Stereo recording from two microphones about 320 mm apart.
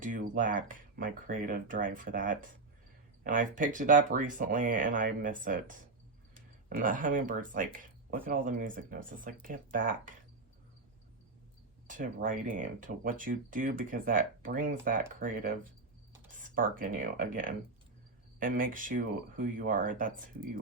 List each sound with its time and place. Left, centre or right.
0.0 s speech: right
11.9 s speech: right